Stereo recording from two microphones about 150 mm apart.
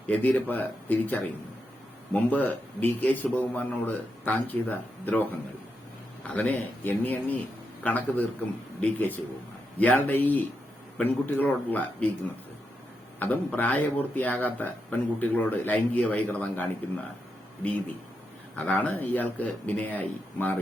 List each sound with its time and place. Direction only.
0.1 s speech: 10° left (ahead or behind)
13.1 s speech: 10° left (ahead or behind)